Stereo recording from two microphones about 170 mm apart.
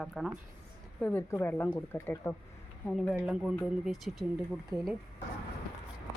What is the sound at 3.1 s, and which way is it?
Speech, 5° right (ahead or behind).